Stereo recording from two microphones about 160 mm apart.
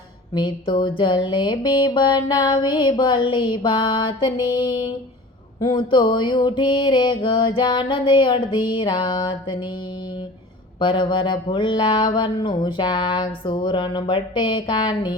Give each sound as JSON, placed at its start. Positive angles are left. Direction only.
{"t": 0.3, "sound": "music", "side_deg": 30}
{"t": 10.8, "sound": "music", "side_deg": 30}